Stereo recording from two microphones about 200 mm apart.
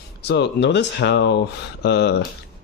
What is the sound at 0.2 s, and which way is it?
Speech, 55° left (ahead or behind).